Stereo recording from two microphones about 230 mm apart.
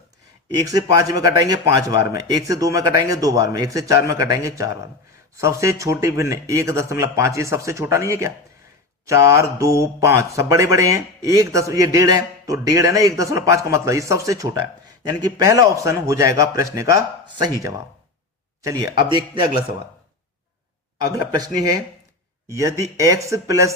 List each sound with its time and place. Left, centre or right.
0.5 s speech: centre
21.1 s speech: centre